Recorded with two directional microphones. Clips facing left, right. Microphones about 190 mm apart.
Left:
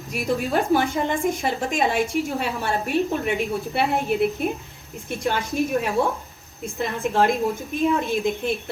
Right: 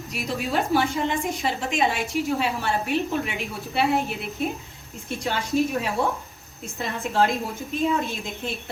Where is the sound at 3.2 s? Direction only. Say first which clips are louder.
Left 8 dB; 50° left (ahead or behind).